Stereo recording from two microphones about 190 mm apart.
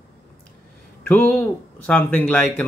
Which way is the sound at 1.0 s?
10° left (ahead or behind).